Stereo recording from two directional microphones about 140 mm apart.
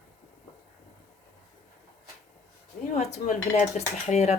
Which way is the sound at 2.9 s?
60° left (ahead or behind).